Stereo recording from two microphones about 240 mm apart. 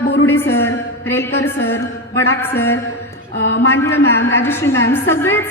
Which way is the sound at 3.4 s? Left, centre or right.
Left.